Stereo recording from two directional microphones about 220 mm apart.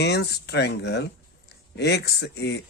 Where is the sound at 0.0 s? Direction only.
50° left (ahead or behind).